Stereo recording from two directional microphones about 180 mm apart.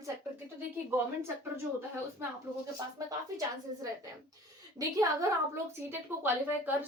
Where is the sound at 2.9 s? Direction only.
20° right (ahead or behind).